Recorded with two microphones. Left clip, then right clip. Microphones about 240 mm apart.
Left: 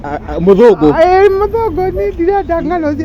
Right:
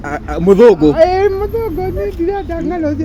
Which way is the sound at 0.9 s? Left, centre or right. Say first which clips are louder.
Left 3 dB; left.